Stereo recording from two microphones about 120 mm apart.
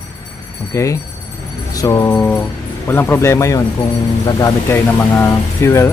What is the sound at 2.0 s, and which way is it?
A man's voice, 15° left (ahead or behind).